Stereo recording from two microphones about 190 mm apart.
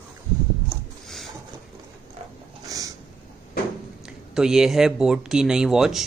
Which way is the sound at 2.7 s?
20° right (ahead or behind).